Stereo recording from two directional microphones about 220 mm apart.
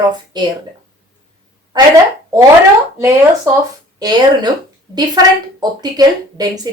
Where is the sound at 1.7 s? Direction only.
20° right (ahead or behind).